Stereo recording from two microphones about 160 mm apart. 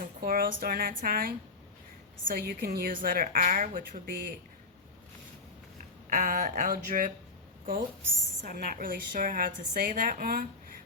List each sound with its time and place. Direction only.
0.0 s a woman's voice: 65° right (ahead or behind)
6.1 s a woman's voice: 55° right (ahead or behind)